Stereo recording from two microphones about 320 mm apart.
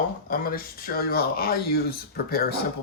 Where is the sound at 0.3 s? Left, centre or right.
Left.